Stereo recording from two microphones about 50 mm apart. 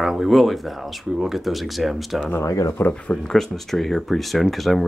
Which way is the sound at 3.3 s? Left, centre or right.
Centre.